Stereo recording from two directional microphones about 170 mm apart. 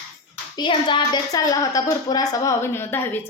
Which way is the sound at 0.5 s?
25° left (ahead or behind).